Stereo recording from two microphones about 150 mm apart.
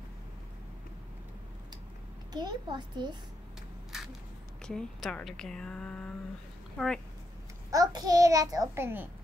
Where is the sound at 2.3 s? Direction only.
30° right (ahead or behind).